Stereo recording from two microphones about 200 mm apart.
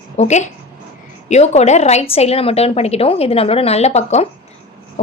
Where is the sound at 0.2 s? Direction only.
35° left (ahead or behind).